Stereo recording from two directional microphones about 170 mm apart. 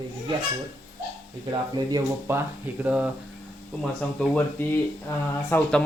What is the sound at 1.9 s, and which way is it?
Speech, 15° right (ahead or behind).